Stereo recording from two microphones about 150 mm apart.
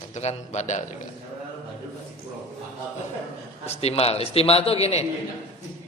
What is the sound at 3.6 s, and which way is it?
A man's voice, 45° left (ahead or behind).